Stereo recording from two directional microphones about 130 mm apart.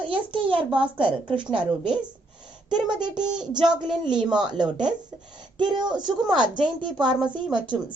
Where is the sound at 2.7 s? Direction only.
35° right (ahead or behind).